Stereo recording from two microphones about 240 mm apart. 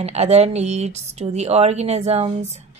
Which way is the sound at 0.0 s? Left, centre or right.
Right.